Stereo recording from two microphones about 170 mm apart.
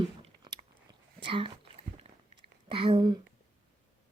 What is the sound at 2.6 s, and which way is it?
Speech, 30° right (ahead or behind).